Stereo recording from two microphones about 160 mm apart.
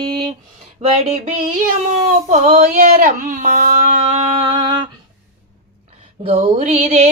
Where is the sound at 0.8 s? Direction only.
45° right (ahead or behind).